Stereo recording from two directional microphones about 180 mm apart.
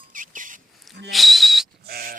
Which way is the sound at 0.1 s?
45° right (ahead or behind).